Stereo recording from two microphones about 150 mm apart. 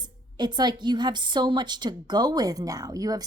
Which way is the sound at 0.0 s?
30° right (ahead or behind).